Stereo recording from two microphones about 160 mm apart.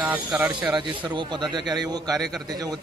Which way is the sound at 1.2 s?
30° right (ahead or behind).